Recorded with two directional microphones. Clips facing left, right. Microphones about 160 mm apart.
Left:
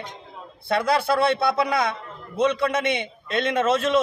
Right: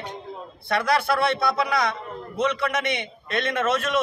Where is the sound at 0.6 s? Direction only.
25° left (ahead or behind).